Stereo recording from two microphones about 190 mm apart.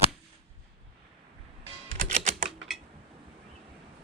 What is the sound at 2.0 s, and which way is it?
Typing, 30° right (ahead or behind).